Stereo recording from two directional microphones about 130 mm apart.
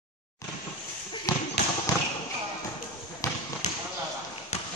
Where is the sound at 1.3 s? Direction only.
30° left (ahead or behind).